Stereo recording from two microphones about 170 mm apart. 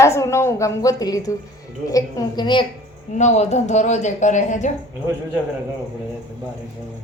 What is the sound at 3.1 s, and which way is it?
Speech, 45° left (ahead or behind).